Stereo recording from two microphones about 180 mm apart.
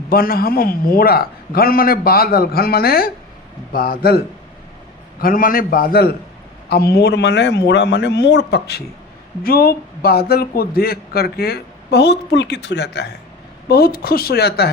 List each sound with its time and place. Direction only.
0.1 s a man's voice: 55° left (ahead or behind)
5.2 s a man's voice: 50° left (ahead or behind); by 8.8 s 70° left (ahead or behind)
9.4 s a man's voice: 55° left (ahead or behind)
13.7 s a man's voice: 60° left (ahead or behind)